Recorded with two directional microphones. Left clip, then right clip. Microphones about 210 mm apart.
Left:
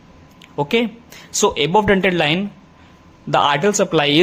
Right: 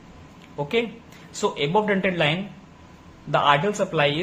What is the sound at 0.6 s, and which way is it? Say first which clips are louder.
A man's voice: left 6 dB; 50° left (ahead or behind).